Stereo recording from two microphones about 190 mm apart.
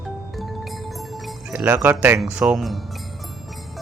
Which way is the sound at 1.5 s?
10° right (ahead or behind).